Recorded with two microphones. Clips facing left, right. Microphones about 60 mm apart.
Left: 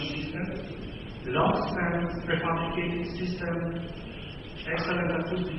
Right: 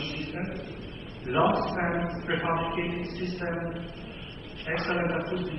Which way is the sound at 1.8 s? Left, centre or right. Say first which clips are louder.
Even; centre.